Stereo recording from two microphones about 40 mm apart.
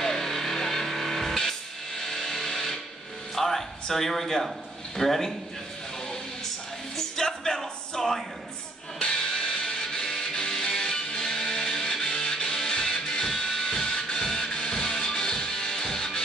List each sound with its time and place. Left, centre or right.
0.0 s music: centre
3.3 s a sound: centre
3.8 s speech: centre
7.0 s music: centre
9.0 s music: centre